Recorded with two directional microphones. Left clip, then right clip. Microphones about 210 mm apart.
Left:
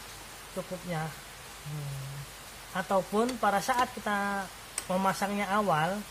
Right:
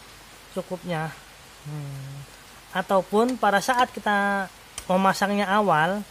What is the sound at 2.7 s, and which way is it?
Speech, 55° right (ahead or behind).